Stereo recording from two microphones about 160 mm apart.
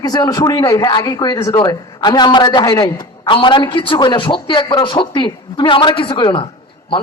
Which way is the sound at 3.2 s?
30° left (ahead or behind).